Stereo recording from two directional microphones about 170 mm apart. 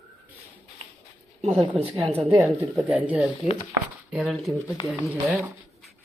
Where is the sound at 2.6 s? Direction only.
Centre (ahead or behind).